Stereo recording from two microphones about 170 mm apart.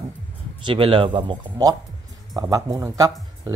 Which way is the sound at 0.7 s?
30° right (ahead or behind).